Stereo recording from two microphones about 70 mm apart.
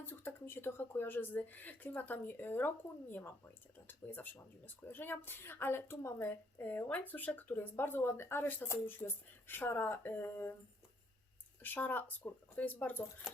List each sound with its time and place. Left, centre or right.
0.0 s speech: left
6.2 s speech: left
11.6 s speech: left